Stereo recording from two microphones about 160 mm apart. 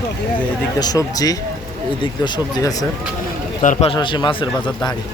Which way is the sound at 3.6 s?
50° left (ahead or behind).